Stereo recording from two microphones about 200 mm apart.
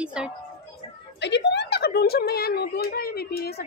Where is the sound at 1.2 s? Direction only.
60° left (ahead or behind).